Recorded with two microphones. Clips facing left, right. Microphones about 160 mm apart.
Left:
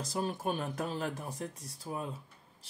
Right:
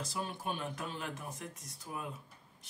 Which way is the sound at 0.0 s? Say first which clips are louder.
Left 5 dB; 40° left (ahead or behind).